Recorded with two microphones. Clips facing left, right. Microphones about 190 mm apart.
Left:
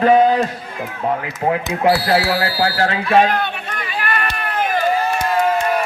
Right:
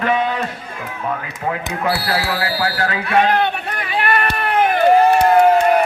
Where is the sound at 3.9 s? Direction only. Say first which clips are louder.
Right 4 dB; 60° right (ahead or behind).